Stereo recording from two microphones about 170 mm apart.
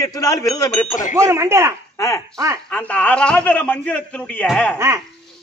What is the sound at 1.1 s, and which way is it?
Speech, 15° right (ahead or behind).